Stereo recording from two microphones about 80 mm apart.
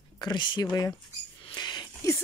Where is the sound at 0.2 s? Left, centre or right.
Left.